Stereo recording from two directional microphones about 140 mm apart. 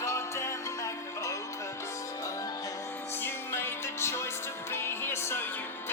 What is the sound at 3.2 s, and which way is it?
Music, 15° left (ahead or behind).